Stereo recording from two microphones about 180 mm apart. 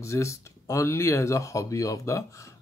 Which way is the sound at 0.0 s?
15° left (ahead or behind).